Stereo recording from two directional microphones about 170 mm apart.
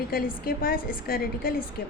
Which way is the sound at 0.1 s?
60° left (ahead or behind).